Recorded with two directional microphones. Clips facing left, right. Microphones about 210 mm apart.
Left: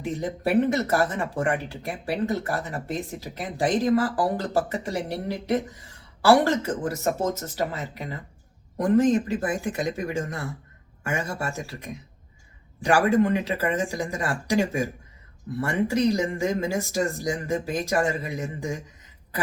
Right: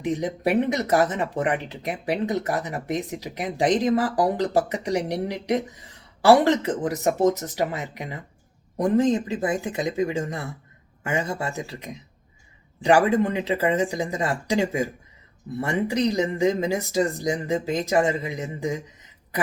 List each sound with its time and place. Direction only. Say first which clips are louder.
0.0 s speech: right 3 dB; 20° right (ahead or behind)